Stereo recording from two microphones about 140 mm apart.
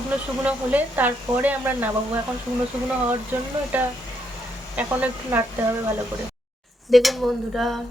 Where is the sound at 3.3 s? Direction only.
15° right (ahead or behind).